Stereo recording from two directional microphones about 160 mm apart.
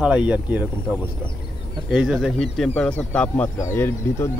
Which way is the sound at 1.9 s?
5° right (ahead or behind).